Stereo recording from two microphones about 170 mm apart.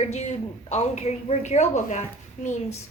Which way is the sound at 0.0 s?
40° left (ahead or behind).